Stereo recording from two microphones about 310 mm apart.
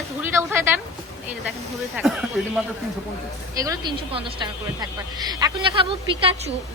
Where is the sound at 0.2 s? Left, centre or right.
Centre.